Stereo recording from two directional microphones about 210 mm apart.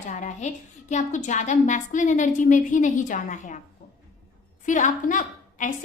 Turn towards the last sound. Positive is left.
turn(degrees=35)  # may be behind; listen again after turning